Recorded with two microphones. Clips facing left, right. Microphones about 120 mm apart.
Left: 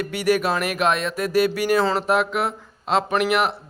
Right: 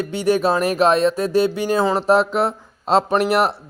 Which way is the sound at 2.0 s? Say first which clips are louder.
Right 5 dB; 30° right (ahead or behind).